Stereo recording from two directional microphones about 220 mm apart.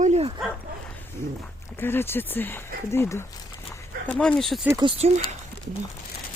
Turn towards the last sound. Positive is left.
turn(degrees=-25)  # may be behind; listen again after turning